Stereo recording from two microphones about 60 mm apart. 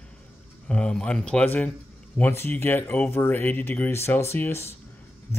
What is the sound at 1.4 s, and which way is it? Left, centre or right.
Speech, left.